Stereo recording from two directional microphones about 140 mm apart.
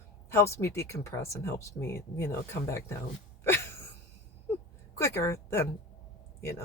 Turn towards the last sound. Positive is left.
turn(degrees=20)  # may be behind; listen again after turning